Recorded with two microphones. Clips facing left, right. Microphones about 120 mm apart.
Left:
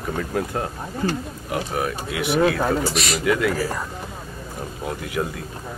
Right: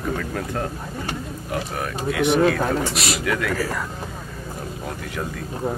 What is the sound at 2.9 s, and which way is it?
Speech, 35° right (ahead or behind).